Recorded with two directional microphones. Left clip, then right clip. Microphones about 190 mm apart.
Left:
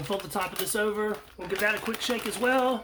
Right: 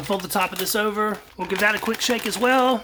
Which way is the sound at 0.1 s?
35° right (ahead or behind).